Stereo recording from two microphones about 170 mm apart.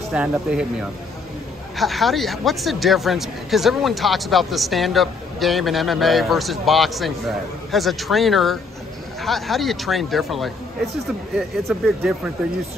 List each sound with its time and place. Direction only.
0.1 s speech: 5° right (ahead or behind)
1.8 s speech: centre (ahead or behind)